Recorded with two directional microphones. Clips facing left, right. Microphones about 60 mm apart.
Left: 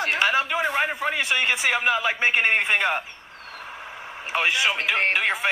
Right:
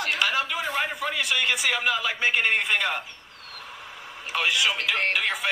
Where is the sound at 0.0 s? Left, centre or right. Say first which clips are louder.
Left 3 dB; left.